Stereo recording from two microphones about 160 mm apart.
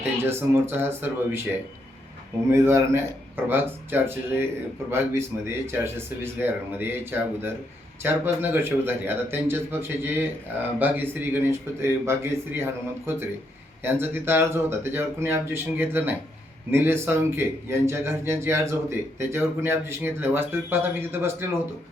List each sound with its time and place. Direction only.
0.0 s a man's voice: 15° right (ahead or behind)
2.5 s a man's voice: 15° right (ahead or behind)